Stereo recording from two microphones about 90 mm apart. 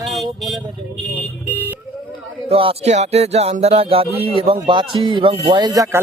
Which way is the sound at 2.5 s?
90° right.